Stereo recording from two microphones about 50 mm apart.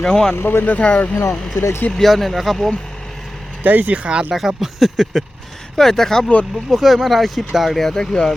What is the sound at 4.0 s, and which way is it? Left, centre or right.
Speech, right.